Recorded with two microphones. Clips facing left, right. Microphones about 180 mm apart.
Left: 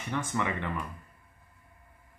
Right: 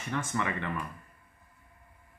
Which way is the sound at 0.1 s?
15° left (ahead or behind).